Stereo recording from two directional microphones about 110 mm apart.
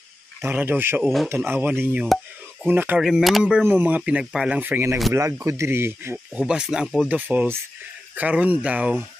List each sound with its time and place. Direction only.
0.4 s speech: 20° right (ahead or behind)
1.0 s speech: centre (ahead or behind)
1.3 s speech: 20° right (ahead or behind)
3.0 s speech: centre (ahead or behind)
3.6 s speech: 15° right (ahead or behind)
5.1 s speech: 25° right (ahead or behind)
6.1 s speech: 10° right (ahead or behind)